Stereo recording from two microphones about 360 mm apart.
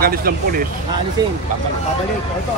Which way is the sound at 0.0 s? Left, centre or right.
Right.